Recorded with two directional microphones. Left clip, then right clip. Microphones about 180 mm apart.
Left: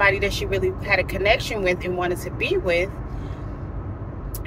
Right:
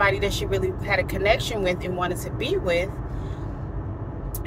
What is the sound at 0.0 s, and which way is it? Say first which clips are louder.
Speech: left 2 dB; 20° right (ahead or behind).